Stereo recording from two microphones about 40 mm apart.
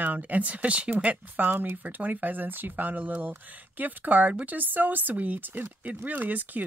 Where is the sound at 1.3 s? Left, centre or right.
Right.